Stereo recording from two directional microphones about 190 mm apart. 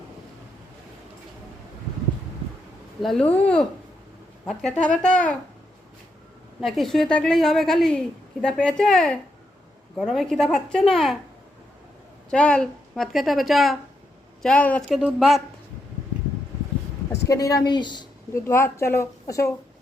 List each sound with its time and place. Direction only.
3.0 s a woman's voice: 5° left (ahead or behind)
6.6 s a woman's voice: centre (ahead or behind)
12.3 s a woman's voice: 5° left (ahead or behind)
17.2 s speech: 15° left (ahead or behind)